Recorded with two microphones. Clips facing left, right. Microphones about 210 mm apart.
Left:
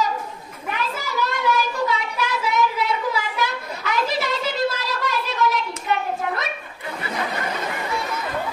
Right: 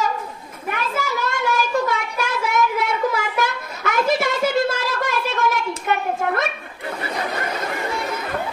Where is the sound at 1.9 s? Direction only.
50° right (ahead or behind).